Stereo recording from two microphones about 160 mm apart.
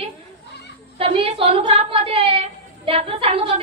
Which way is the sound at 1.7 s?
35° right (ahead or behind).